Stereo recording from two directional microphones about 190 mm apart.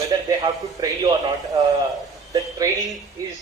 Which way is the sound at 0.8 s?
15° right (ahead or behind).